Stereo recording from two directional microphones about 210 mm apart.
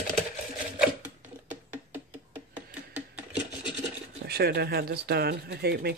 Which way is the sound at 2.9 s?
5° right (ahead or behind).